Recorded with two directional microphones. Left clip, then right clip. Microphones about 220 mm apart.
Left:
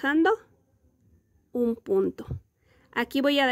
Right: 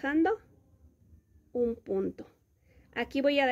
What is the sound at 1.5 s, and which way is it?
Speech, 40° left (ahead or behind).